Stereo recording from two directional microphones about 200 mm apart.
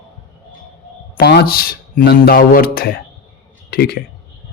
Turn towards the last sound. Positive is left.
turn(degrees=50)  # may be behind; listen again after turning